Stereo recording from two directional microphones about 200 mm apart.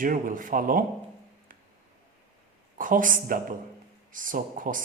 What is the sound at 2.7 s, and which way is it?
Speech, 40° right (ahead or behind).